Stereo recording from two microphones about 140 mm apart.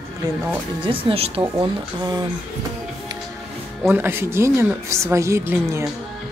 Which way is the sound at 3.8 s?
15° right (ahead or behind).